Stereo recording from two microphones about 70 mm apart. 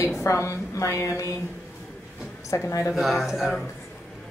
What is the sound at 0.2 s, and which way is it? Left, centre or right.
A woman's voice, left.